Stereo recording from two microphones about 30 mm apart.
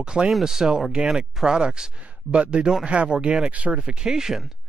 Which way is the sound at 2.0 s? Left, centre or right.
Right.